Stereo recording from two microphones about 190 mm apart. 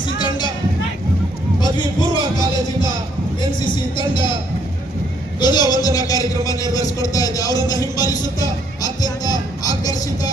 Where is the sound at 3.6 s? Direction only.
25° left (ahead or behind).